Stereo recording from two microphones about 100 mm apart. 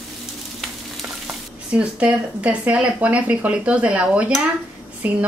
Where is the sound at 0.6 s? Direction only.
5° right (ahead or behind).